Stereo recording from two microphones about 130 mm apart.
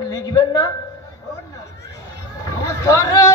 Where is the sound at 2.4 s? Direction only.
20° left (ahead or behind).